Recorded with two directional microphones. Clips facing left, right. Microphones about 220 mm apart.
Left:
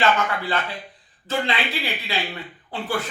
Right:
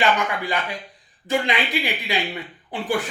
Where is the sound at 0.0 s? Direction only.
15° right (ahead or behind).